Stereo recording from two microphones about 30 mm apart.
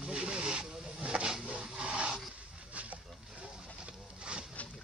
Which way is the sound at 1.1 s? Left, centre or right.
Right.